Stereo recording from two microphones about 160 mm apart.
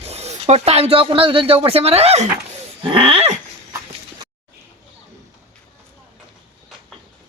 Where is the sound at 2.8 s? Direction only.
35° right (ahead or behind).